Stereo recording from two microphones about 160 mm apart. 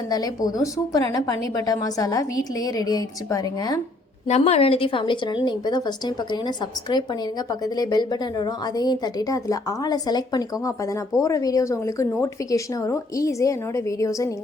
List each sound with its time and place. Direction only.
0.1 s a woman's voice: 25° left (ahead or behind)
4.3 s a woman's voice: 40° left (ahead or behind); by 14.3 s 20° left (ahead or behind)